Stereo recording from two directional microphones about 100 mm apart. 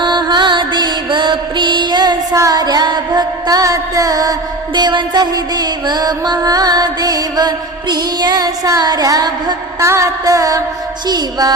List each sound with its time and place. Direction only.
0.0 s music: 50° right (ahead or behind)
2.3 s music: 35° right (ahead or behind)
9.8 s music: 30° right (ahead or behind)